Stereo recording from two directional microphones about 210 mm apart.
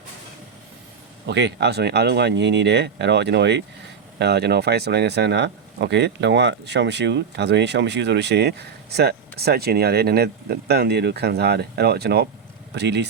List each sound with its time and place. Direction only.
1.3 s speech: 55° right (ahead or behind)